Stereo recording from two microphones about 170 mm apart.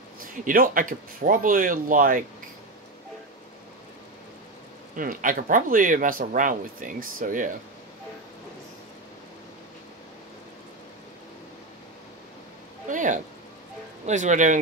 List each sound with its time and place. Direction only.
0.2 s speech: 55° right (ahead or behind)
4.9 s speech: 50° right (ahead or behind)
12.8 s a sound: 50° right (ahead or behind)
14.0 s speech: 45° right (ahead or behind)